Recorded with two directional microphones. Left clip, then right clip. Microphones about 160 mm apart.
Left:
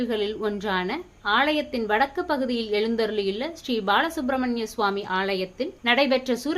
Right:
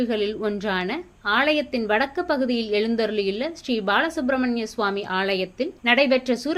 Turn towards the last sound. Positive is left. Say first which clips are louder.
# right 2 dB
turn(degrees=-10)  # may be behind; listen again after turning